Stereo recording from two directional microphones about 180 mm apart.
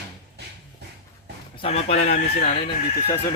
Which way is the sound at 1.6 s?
35° left (ahead or behind).